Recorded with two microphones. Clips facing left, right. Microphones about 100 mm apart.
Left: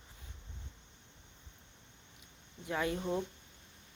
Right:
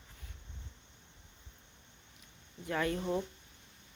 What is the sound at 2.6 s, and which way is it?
Speech, 10° left (ahead or behind).